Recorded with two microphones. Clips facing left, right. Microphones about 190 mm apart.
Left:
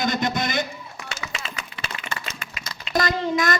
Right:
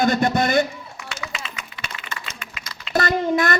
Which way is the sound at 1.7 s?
30° left (ahead or behind).